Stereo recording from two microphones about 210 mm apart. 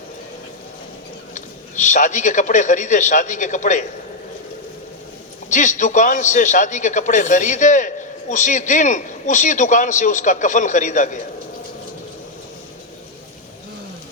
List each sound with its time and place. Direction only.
1.3 s a man's voice: 35° left (ahead or behind)
5.5 s a man's voice: 35° left (ahead or behind)